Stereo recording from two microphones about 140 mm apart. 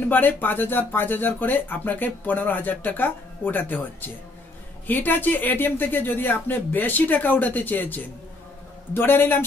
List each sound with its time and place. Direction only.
0.1 s speech: 15° left (ahead or behind)